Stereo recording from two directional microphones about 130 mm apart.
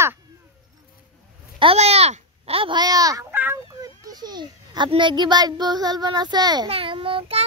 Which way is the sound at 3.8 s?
30° right (ahead or behind).